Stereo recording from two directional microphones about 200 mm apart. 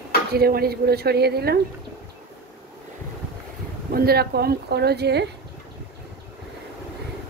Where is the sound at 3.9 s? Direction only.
50° right (ahead or behind).